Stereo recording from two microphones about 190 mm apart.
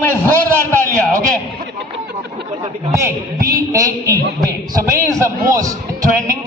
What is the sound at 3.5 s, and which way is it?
A man's voice, 15° right (ahead or behind).